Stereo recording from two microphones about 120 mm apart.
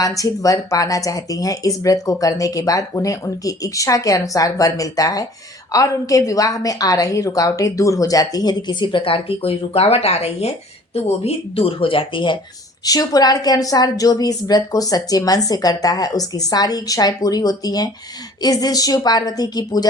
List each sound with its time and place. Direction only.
0.0 s a woman's voice: 30° left (ahead or behind)
12.8 s a woman's voice: 30° left (ahead or behind)